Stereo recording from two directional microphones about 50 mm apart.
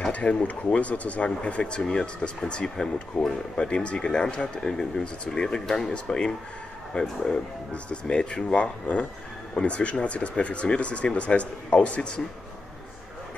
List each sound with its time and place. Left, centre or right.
0.1 s speech: left